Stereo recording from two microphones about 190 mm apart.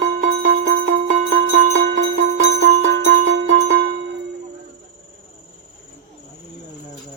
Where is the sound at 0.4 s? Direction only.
70° right (ahead or behind).